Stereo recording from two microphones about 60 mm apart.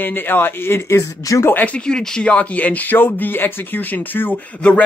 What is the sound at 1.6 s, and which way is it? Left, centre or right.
Speech, centre.